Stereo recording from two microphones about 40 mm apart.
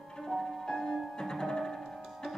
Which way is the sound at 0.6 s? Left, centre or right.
Centre.